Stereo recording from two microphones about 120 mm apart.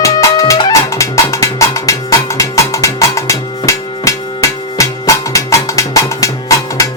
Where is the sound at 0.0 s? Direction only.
25° left (ahead or behind).